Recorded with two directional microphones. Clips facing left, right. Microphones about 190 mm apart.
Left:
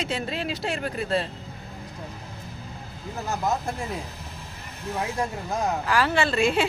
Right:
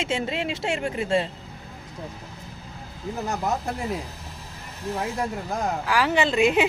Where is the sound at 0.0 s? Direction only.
25° right (ahead or behind).